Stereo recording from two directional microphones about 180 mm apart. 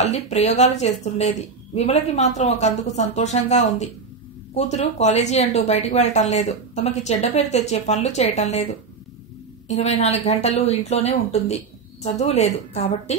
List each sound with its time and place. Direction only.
0.0 s speech: 40° left (ahead or behind)
9.7 s speech: 35° left (ahead or behind)